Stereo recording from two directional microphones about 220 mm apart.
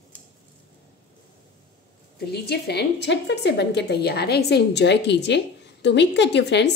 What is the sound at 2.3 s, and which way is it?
A woman's voice, 45° left (ahead or behind).